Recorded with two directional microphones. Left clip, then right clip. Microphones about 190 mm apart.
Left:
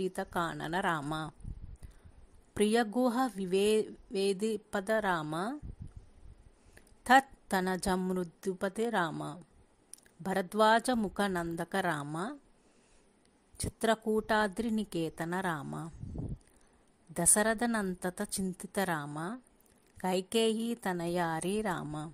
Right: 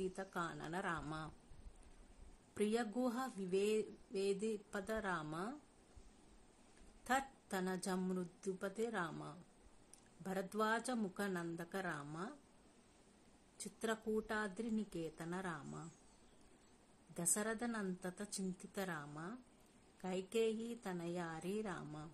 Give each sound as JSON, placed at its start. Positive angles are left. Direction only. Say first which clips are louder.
{"t": 0.0, "sound": "a woman's voice", "louder": "left 10 dB", "side_deg": 40}
{"t": 2.5, "sound": "speech", "louder": "left 11 dB", "side_deg": 45}
{"t": 7.0, "sound": "a woman's voice", "louder": "left 15 dB", "side_deg": 45}
{"t": 13.7, "sound": "a woman's voice", "louder": "left 11 dB", "side_deg": 45}
{"t": 17.1, "sound": "a woman's voice", "louder": "left 13 dB", "side_deg": 45}